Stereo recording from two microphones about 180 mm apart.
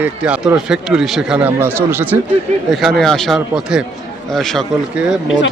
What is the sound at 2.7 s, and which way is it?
A man's voice, centre (ahead or behind).